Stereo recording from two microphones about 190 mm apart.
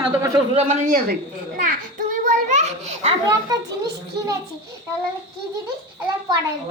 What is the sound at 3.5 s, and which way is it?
Speech, 20° right (ahead or behind).